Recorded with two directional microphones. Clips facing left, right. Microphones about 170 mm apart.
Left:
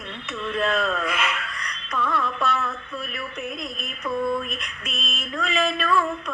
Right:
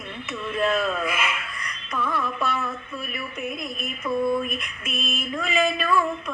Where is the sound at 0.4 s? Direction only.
5° right (ahead or behind).